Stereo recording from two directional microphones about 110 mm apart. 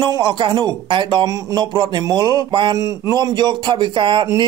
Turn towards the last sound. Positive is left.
turn(degrees=-45)  # may be behind; listen again after turning